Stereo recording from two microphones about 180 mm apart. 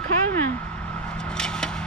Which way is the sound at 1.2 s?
5° left (ahead or behind).